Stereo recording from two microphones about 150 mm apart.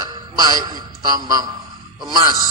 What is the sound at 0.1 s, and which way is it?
A man's voice, 25° right (ahead or behind).